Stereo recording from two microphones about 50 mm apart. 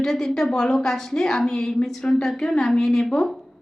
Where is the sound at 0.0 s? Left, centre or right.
Centre.